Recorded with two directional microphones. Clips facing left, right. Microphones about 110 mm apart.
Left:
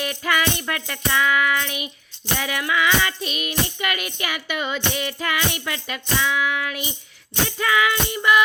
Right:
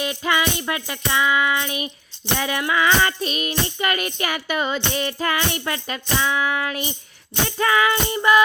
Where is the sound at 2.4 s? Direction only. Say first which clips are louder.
Right 1 dB; 30° right (ahead or behind).